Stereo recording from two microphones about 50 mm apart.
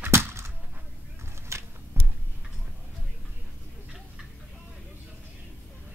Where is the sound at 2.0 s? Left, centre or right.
Right.